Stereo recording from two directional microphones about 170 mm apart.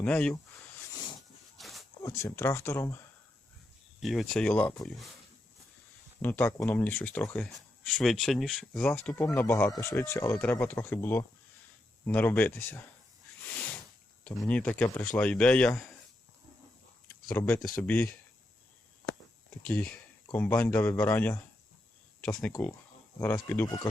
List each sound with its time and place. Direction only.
0.0 s speech: 5° left (ahead or behind)
1.5 s a sound: centre (ahead or behind)
2.0 s speech: 15° left (ahead or behind)
4.0 s speech: centre (ahead or behind)
6.2 s speech: 15° left (ahead or behind)
13.4 s a sound: 10° left (ahead or behind)
14.3 s speech: 5° left (ahead or behind)
17.3 s speech: 10° left (ahead or behind)
19.6 s speech: 10° left (ahead or behind)